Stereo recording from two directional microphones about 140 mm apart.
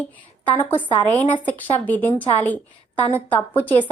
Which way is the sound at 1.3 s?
15° left (ahead or behind).